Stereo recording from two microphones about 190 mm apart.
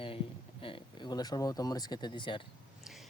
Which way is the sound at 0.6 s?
30° left (ahead or behind).